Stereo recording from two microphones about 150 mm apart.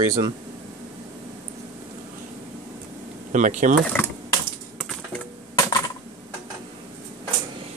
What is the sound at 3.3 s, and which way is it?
Speech, 55° right (ahead or behind).